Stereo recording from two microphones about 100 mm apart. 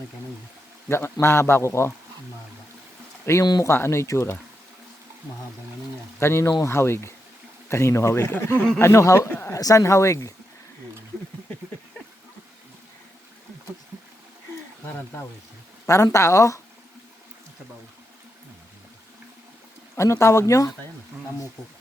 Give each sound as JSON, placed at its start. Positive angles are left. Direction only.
{"t": 0.9, "sound": "speech", "side_deg": 25}
{"t": 3.4, "sound": "speech", "side_deg": 45}
{"t": 3.7, "sound": "speech", "side_deg": 25}
{"t": 6.1, "sound": "speech", "side_deg": 25}
{"t": 16.1, "sound": "speech", "side_deg": 30}
{"t": 20.0, "sound": "speech", "side_deg": 30}